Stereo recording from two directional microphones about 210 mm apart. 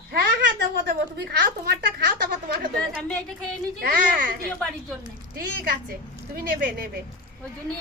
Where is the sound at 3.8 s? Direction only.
45° right (ahead or behind).